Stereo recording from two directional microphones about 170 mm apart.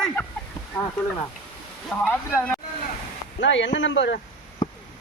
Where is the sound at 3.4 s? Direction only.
90° left.